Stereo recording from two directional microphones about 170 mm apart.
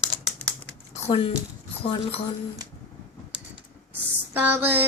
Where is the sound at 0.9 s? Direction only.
35° left (ahead or behind).